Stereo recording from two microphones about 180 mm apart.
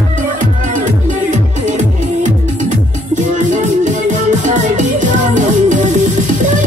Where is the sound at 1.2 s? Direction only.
45° right (ahead or behind).